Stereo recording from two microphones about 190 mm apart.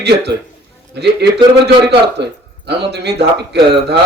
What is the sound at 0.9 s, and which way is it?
A man's voice, 60° right (ahead or behind).